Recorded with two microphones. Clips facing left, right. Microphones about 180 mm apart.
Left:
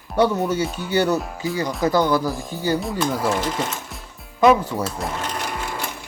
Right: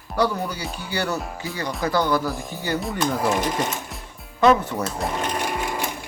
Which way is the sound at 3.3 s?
15° right (ahead or behind).